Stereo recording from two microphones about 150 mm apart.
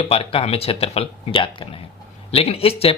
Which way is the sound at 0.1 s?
40° left (ahead or behind).